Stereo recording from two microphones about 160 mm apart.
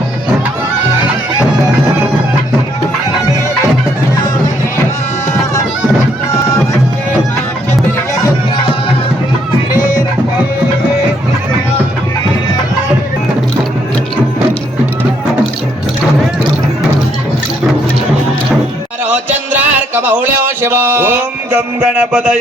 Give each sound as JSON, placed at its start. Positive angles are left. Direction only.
{"t": 9.7, "sound": "music", "side_deg": 55}
{"t": 19.0, "sound": "music", "side_deg": -10}
{"t": 20.6, "sound": "a sound", "side_deg": -15}